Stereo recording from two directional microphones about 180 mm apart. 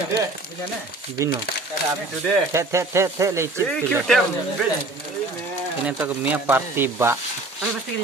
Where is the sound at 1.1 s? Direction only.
15° right (ahead or behind).